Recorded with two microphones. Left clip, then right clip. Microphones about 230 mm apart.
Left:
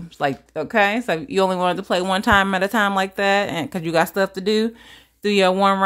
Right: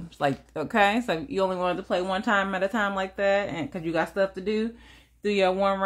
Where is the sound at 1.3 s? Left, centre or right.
Left.